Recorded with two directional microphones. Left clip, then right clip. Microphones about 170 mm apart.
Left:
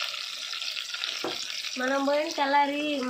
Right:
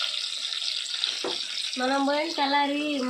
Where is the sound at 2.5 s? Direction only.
5° left (ahead or behind).